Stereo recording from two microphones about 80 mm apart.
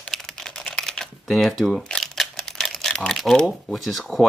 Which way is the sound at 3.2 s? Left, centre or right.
Centre.